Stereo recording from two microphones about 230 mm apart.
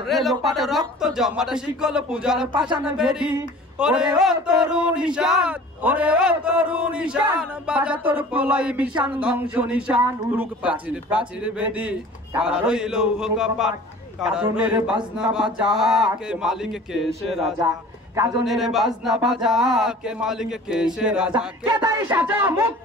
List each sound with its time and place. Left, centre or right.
0.0 s speech: centre
21.6 s speech: centre
22.0 s speech: centre